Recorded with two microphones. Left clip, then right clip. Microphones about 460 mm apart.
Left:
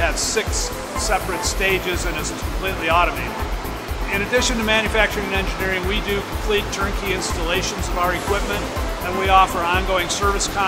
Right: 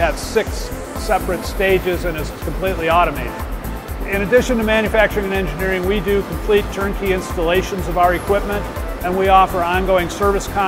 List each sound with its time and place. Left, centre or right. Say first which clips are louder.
0.0 s music: right 3 dB; right
1.0 s speech: right 3 dB; right
4.1 s speech: right 5 dB; right
9.2 s speech: right 3 dB; right